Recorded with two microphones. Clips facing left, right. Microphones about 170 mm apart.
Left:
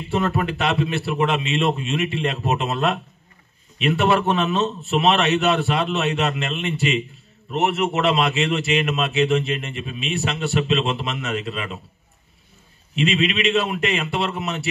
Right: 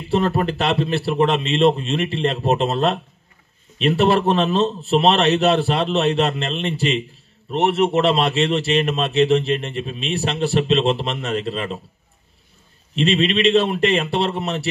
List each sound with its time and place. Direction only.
0.1 s a man's voice: 35° right (ahead or behind)
13.0 s a man's voice: 30° right (ahead or behind)